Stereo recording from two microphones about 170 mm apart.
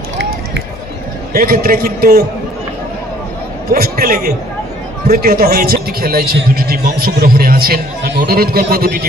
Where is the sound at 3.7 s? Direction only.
65° right (ahead or behind).